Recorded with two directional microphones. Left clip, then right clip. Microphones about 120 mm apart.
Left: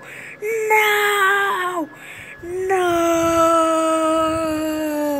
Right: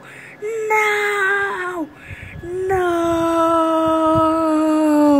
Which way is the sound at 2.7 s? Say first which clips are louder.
Left 1 dB; 10° right (ahead or behind).